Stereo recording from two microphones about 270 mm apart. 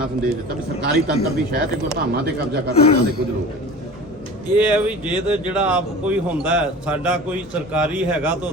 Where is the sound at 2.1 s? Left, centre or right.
Right.